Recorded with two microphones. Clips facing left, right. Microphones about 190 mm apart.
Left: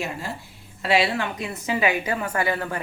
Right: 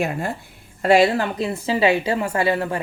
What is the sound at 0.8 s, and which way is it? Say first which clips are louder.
A woman's voice: right 6 dB; 45° right (ahead or behind).